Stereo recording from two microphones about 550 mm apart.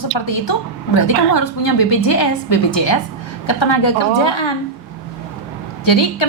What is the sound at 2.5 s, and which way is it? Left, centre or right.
A woman's voice, left.